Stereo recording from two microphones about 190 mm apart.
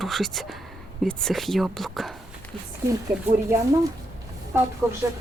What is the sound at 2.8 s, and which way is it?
Speech, 15° right (ahead or behind).